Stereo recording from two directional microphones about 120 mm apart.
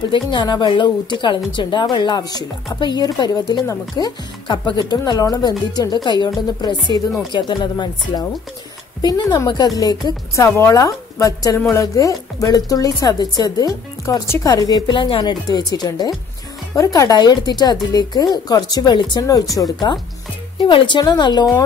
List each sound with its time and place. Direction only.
0.1 s speech: 40° left (ahead or behind)
7.3 s a woman's voice: 40° left (ahead or behind)
14.2 s a woman's voice: 20° left (ahead or behind)
14.5 s speech: 35° left (ahead or behind)